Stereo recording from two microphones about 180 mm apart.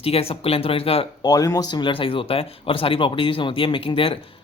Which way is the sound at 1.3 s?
20° left (ahead or behind).